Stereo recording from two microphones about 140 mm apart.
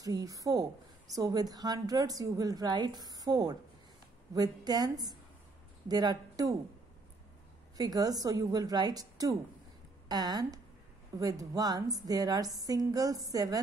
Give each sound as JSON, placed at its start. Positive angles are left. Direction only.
{"t": 0.0, "sound": "a woman's voice", "side_deg": -25}
{"t": 7.7, "sound": "a woman's voice", "side_deg": -25}